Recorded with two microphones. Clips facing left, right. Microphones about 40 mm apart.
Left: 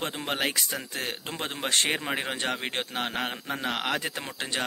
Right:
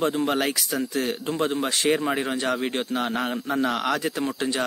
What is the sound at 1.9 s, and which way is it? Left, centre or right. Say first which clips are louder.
A man's voice: right 6 dB; left.